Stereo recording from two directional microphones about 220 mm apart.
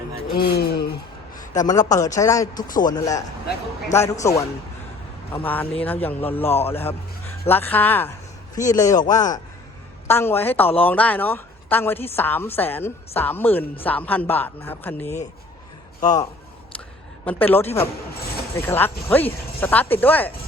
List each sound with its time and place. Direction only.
0.3 s a sound: 45° left (ahead or behind)
1.4 s a woman's voice: 15° left (ahead or behind)
17.2 s a woman's voice: 10° left (ahead or behind)
18.1 s speech: 45° left (ahead or behind)
18.5 s a woman's voice: 10° left (ahead or behind)